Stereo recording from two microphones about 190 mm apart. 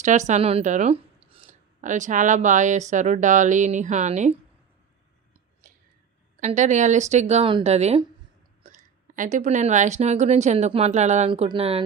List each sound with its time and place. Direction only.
0.0 s speech: 40° right (ahead or behind)
6.4 s speech: 40° right (ahead or behind)